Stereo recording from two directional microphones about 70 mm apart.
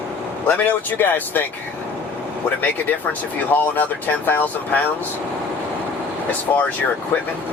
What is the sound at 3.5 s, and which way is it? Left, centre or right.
Speech, left.